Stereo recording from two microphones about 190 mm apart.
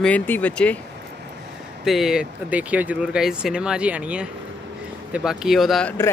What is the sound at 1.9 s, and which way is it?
Speech, centre (ahead or behind).